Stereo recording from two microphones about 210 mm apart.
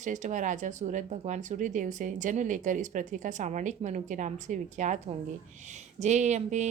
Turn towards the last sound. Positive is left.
turn(degrees=-35)  # may be behind; listen again after turning